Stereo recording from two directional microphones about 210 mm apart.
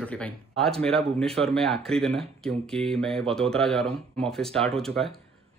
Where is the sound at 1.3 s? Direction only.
30° right (ahead or behind).